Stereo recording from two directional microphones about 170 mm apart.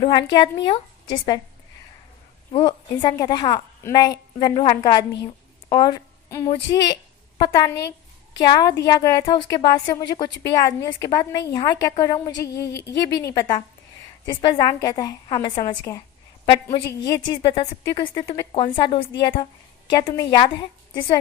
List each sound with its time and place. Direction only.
0.0 s a woman's voice: 30° left (ahead or behind)
2.5 s a woman's voice: 30° left (ahead or behind)
6.8 s a sound: 25° left (ahead or behind)
8.4 s a woman's voice: 25° left (ahead or behind)